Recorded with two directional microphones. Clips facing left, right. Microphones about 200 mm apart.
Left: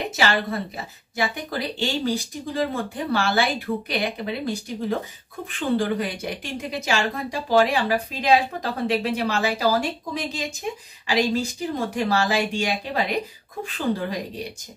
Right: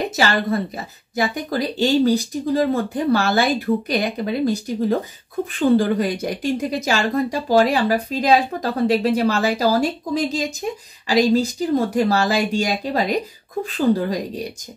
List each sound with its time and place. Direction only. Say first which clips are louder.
0.1 s speech: right 4 dB; 40° right (ahead or behind)